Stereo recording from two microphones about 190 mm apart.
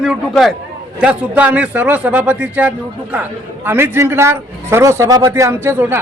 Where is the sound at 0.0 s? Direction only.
Centre (ahead or behind).